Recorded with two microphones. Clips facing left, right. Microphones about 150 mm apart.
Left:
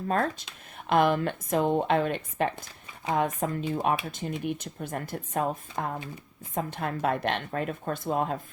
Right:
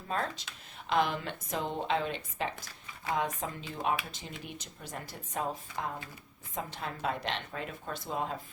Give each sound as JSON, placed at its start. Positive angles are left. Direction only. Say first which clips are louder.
{"t": 0.1, "sound": "speech", "louder": "left 6 dB", "side_deg": 50}